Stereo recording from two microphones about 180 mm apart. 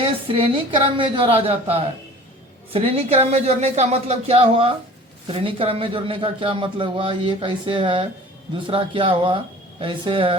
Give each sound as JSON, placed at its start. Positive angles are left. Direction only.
{"t": 0.0, "sound": "a man's voice", "side_deg": -30}